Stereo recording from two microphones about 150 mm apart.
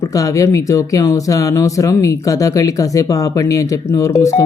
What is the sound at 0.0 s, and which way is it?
Speech, 25° left (ahead or behind).